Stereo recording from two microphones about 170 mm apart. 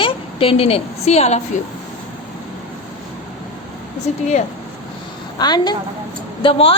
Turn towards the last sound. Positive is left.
turn(degrees=30)  # may be behind; listen again after turning